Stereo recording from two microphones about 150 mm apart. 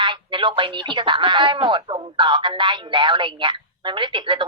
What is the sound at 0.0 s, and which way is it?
Speech, 35° right (ahead or behind).